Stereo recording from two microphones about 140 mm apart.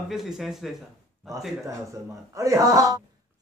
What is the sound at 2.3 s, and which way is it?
Speech, 20° right (ahead or behind).